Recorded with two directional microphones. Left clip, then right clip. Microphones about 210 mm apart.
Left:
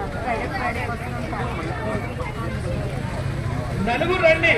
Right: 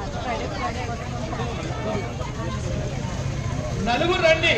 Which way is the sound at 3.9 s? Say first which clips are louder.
Left 1 dB; 35° right (ahead or behind).